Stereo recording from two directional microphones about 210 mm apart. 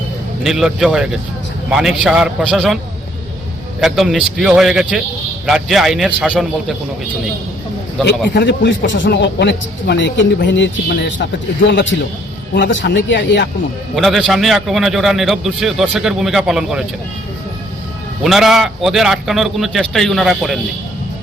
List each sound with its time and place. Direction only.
0.4 s a man's voice: centre (ahead or behind)
3.8 s a man's voice: centre (ahead or behind)
8.0 s a man's voice: 55° left (ahead or behind)
13.9 s a man's voice: centre (ahead or behind)
18.2 s a man's voice: centre (ahead or behind)